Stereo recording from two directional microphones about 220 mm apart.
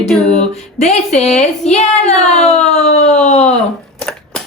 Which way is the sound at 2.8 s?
30° left (ahead or behind).